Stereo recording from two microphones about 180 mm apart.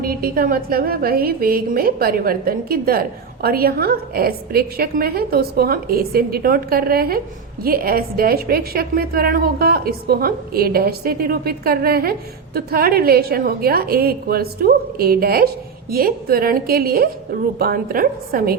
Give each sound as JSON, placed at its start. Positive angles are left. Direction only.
{"t": 0.0, "sound": "a woman's voice", "side_deg": -55}